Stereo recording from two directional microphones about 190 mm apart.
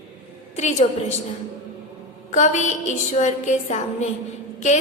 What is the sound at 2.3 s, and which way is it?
A woman's voice, 40° left (ahead or behind).